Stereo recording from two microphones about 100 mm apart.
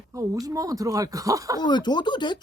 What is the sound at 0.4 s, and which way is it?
Speech, 35° right (ahead or behind).